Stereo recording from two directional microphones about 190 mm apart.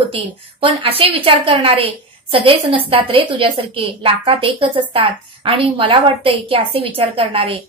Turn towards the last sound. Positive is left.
turn(degrees=-30)  # may be behind; listen again after turning